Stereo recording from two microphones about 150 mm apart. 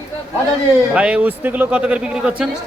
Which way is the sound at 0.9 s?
10° right (ahead or behind).